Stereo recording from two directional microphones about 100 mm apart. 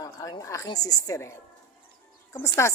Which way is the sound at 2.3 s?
30° left (ahead or behind).